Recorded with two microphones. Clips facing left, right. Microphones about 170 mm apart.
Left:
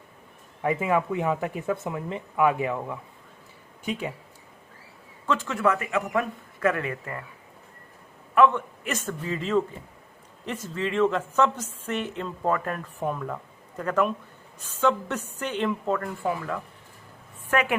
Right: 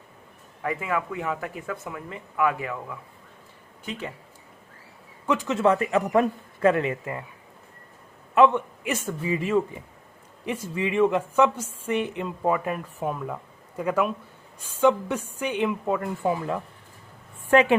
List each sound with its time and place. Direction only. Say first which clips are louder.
0.6 s speech: left 4 dB; 20° left (ahead or behind)
5.2 s a man's voice: right 3 dB; 15° right (ahead or behind)
8.4 s a man's voice: right 1 dB; 15° right (ahead or behind)